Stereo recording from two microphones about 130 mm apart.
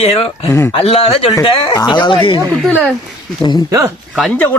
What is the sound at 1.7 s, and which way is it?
Speech, 30° left (ahead or behind).